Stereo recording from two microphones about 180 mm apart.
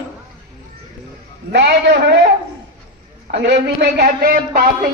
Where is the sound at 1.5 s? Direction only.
70° right (ahead or behind).